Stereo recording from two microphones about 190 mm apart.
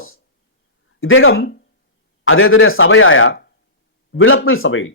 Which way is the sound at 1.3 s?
55° left (ahead or behind).